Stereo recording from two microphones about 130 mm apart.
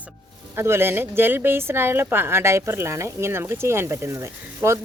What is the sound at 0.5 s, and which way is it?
Speech, 20° right (ahead or behind).